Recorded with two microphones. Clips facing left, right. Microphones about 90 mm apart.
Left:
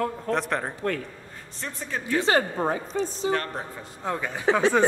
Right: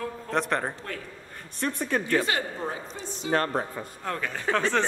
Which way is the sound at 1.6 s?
60° right (ahead or behind).